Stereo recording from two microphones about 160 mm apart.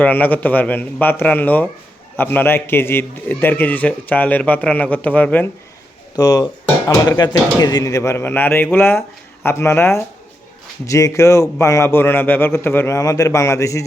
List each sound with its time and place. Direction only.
0.0 s speech: 10° left (ahead or behind)
6.1 s speech: 20° left (ahead or behind)